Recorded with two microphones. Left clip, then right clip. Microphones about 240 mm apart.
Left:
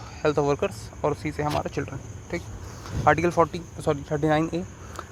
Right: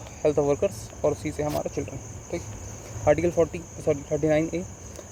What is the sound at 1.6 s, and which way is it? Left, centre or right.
Speech, centre.